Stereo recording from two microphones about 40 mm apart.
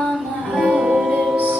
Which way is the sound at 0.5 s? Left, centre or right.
Right.